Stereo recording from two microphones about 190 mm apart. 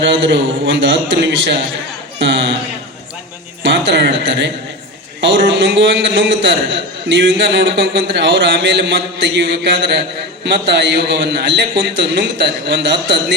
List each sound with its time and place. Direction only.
0.0 s a man's voice: 75° right (ahead or behind)
3.6 s a man's voice: 70° right (ahead or behind)